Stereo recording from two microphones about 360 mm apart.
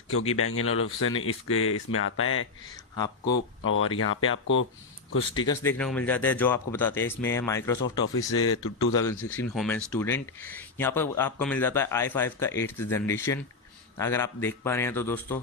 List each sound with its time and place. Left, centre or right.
0.3 s speech: left
5.5 s speech: centre
8.4 s speech: left
8.9 s speech: centre